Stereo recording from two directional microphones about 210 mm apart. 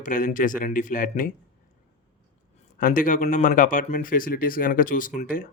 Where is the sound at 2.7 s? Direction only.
40° left (ahead or behind).